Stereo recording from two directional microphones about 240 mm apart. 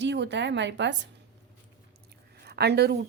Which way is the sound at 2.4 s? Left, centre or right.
Right.